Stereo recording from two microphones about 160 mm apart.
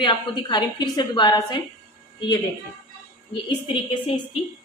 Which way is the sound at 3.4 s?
30° left (ahead or behind).